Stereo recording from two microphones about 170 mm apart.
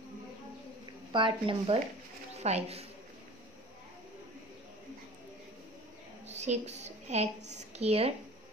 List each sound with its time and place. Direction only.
1.1 s a woman's voice: 30° right (ahead or behind)
6.2 s a woman's voice: 40° right (ahead or behind)